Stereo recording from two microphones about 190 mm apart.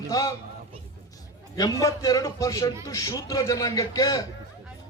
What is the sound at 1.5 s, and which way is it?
A man's voice, 20° left (ahead or behind).